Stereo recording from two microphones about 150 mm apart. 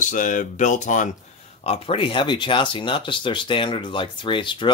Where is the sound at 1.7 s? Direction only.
35° left (ahead or behind).